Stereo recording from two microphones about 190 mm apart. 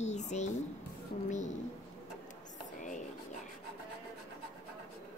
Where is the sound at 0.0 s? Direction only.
35° left (ahead or behind).